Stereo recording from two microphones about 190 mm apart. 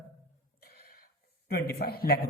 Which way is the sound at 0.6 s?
55° left (ahead or behind).